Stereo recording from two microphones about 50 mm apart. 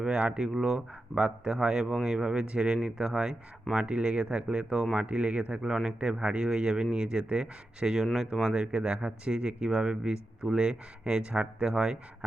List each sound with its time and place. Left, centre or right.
0.0 s speech: centre
2.7 s speech: centre; by 5.7 s right
5.7 s speech: centre